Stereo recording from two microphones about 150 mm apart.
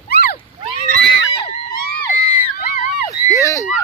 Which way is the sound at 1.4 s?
75° left (ahead or behind).